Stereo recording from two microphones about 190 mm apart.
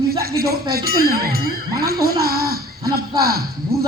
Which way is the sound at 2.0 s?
55° right (ahead or behind).